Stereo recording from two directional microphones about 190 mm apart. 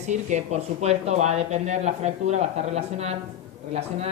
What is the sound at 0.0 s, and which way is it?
Speech, 35° right (ahead or behind).